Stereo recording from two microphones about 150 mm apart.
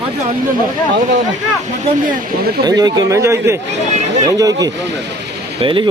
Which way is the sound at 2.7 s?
25° right (ahead or behind).